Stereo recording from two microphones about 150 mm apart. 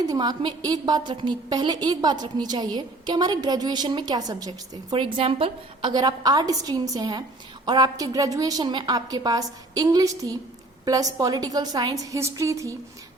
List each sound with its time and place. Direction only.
0.0 s a woman's voice: 25° right (ahead or behind)